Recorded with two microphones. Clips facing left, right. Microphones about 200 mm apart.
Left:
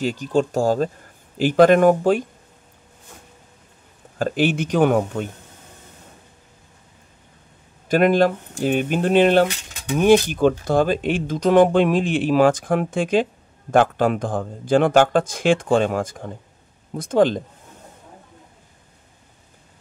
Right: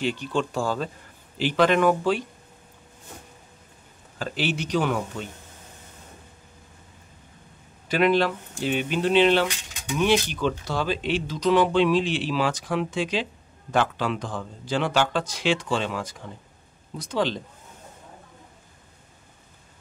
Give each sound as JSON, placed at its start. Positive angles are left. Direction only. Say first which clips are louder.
{"t": 0.0, "sound": "speech", "louder": "left 6 dB", "side_deg": 40}
{"t": 4.2, "sound": "speech", "louder": "left 8 dB", "side_deg": 50}
{"t": 7.9, "sound": "speech", "louder": "left 5 dB", "side_deg": 45}